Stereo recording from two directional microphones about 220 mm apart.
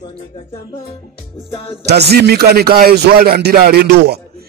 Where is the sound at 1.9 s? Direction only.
50° right (ahead or behind).